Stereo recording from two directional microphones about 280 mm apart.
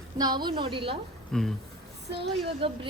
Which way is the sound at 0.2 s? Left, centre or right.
Centre.